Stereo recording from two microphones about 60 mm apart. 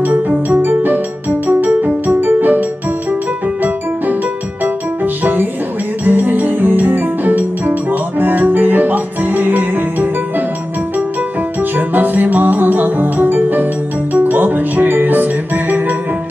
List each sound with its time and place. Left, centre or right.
0.0 s music: right
5.0 s music: right
11.7 s music: right